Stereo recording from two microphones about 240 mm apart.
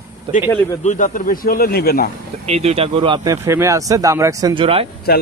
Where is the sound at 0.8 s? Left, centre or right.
Left.